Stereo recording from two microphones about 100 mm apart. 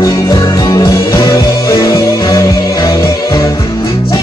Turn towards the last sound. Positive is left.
turn(degrees=35)  # may be behind; listen again after turning